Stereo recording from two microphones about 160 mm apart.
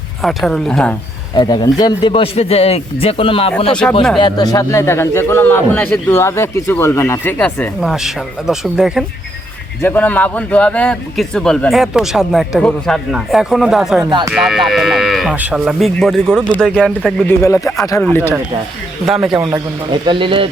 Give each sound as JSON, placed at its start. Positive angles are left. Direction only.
{"t": 0.2, "sound": "a man's voice", "side_deg": 0}
{"t": 1.4, "sound": "speech", "side_deg": 25}
{"t": 3.7, "sound": "a man's voice", "side_deg": 5}
{"t": 4.2, "sound": "a man's voice", "side_deg": 25}
{"t": 9.8, "sound": "a man's voice", "side_deg": 10}
{"t": 14.0, "sound": "speech", "side_deg": -25}
{"t": 14.3, "sound": "a man's voice", "side_deg": 0}
{"t": 17.2, "sound": "a man's voice", "side_deg": 15}
{"t": 19.1, "sound": "a man's voice", "side_deg": -5}
{"t": 19.5, "sound": "speech", "side_deg": -25}